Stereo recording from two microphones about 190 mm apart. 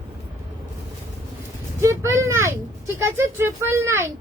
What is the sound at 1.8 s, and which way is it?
A woman's voice, 15° right (ahead or behind).